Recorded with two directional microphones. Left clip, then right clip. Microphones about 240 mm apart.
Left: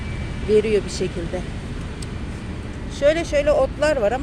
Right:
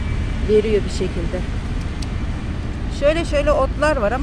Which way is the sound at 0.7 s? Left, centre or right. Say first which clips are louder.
Right 1 dB; centre.